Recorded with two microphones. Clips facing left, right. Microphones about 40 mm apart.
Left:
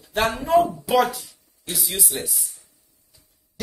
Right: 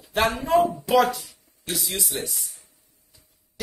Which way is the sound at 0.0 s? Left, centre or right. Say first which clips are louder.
Even; centre.